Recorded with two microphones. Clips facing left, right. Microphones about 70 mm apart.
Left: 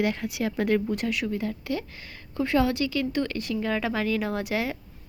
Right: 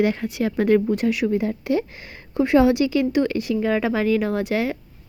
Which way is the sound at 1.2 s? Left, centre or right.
Centre.